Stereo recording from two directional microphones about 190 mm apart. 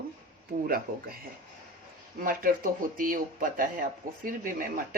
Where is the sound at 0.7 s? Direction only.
50° right (ahead or behind).